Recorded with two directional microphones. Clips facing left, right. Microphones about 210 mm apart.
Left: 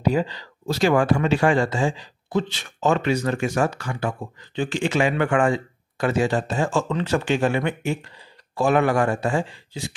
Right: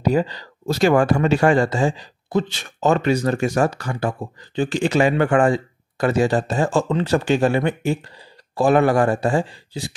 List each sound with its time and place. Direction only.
0.0 s speech: 40° right (ahead or behind)